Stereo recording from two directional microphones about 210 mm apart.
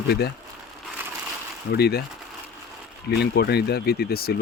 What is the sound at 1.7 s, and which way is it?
Speech, 50° left (ahead or behind).